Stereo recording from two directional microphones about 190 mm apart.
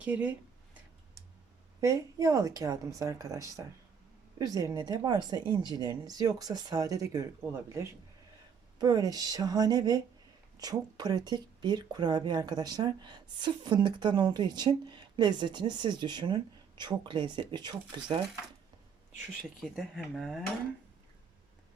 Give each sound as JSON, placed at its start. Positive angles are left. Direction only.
{"t": 0.0, "sound": "a sound", "side_deg": -10}
{"t": 1.8, "sound": "speech", "side_deg": -15}
{"t": 19.7, "sound": "speech", "side_deg": 0}